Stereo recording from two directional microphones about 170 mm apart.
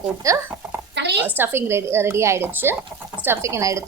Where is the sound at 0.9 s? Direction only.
85° right.